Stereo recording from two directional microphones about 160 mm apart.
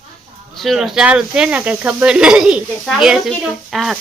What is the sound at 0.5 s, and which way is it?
Speech, centre (ahead or behind).